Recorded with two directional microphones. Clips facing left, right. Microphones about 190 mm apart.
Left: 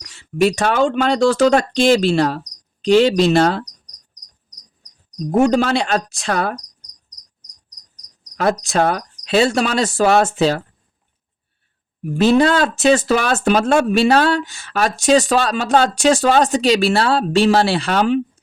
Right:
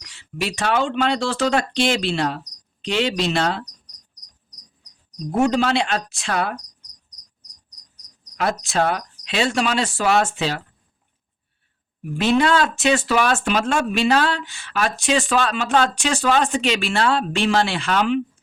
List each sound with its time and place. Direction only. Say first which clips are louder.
0.0 s speech: left 11 dB; 45° left (ahead or behind)
5.2 s speech: left 4 dB; 45° left (ahead or behind)
8.4 s speech: left 4 dB; 40° left (ahead or behind)
12.0 s speech: left 5 dB; 40° left (ahead or behind)